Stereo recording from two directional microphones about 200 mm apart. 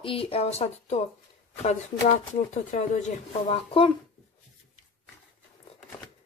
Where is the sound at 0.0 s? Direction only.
25° left (ahead or behind).